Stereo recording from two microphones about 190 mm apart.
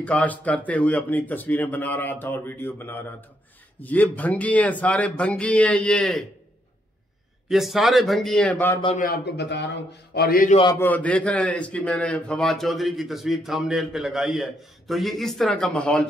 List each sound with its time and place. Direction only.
0.0 s speech: 10° left (ahead or behind)
7.4 s a man's voice: centre (ahead or behind)
8.9 s a man's voice: 50° left (ahead or behind)
10.1 s a man's voice: 50° left (ahead or behind)
10.7 s a man's voice: 10° left (ahead or behind)